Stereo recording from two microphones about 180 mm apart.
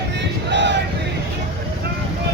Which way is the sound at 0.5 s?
80° right.